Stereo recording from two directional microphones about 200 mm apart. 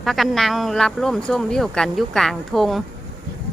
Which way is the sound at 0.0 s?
Centre (ahead or behind).